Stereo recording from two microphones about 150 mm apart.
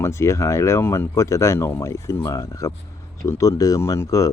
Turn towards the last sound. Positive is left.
turn(degrees=25)  # may be behind; listen again after turning